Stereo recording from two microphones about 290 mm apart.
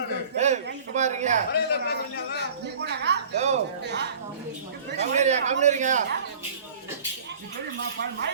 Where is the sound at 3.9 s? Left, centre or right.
Right.